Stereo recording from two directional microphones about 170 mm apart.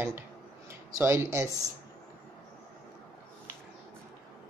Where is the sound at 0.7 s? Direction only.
15° right (ahead or behind).